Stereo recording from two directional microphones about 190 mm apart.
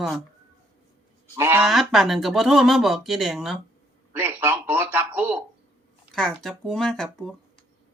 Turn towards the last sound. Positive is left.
turn(degrees=0)  # may be behind; listen again after turning